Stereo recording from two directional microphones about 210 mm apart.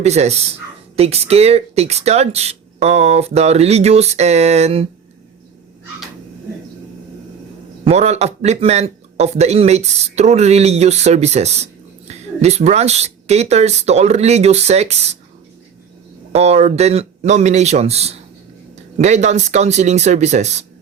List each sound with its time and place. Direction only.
0.0 s speech: 30° right (ahead or behind)
7.9 s speech: 30° right (ahead or behind)
16.3 s speech: 30° right (ahead or behind)